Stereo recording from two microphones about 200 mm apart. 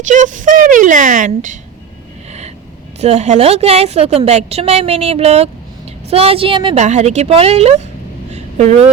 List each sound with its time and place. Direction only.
0.1 s a woman's voice: 40° right (ahead or behind)
3.0 s a woman's voice: 35° right (ahead or behind)
6.8 s a woman's voice: 35° right (ahead or behind)
8.3 s a sound: 35° right (ahead or behind)